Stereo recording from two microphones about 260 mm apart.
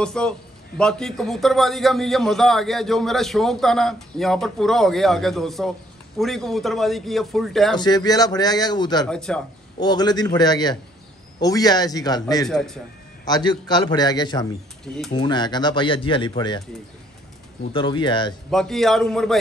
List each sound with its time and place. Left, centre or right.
0.0 s a man's voice: centre
7.7 s speech: centre
9.0 s a man's voice: centre
9.8 s speech: centre
12.4 s a man's voice: centre
13.2 s speech: centre
17.7 s speech: centre
18.5 s a man's voice: centre